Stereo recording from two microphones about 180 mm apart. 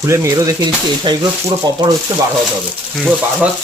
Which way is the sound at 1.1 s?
25° right (ahead or behind).